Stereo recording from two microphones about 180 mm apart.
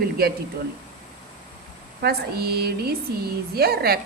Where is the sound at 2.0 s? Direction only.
60° right (ahead or behind).